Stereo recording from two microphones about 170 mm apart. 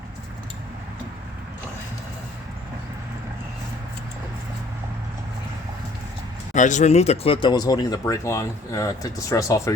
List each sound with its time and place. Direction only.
6.5 s speech: 45° left (ahead or behind); by 9.7 s 20° left (ahead or behind)